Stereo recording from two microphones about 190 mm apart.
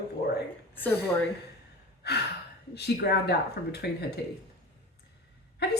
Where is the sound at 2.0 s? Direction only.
60° left (ahead or behind).